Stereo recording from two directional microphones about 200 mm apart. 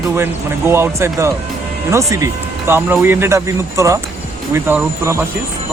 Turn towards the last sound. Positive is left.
turn(degrees=-10)  # may be behind; listen again after turning